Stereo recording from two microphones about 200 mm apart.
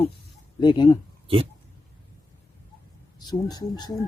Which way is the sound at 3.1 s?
20° left (ahead or behind).